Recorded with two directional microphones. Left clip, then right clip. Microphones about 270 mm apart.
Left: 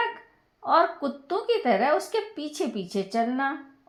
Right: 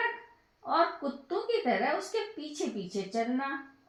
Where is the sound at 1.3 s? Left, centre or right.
Left.